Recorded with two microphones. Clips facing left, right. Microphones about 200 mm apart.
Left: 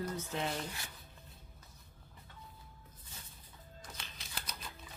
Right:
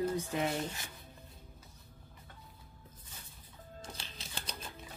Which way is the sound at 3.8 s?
30° right (ahead or behind).